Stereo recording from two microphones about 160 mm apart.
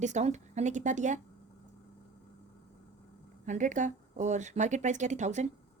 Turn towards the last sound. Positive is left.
turn(degrees=-50)  # may be behind; listen again after turning